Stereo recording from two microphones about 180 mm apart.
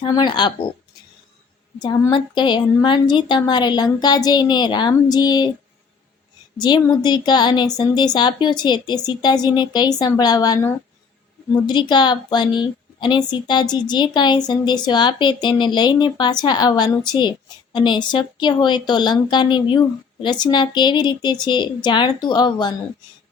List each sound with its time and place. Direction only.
0.0 s a woman's voice: 25° left (ahead or behind)
1.8 s a woman's voice: 25° left (ahead or behind)
6.6 s a woman's voice: 25° left (ahead or behind)